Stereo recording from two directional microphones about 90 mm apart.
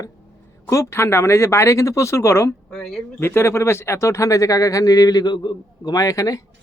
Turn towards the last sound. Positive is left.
turn(degrees=40)  # may be behind; listen again after turning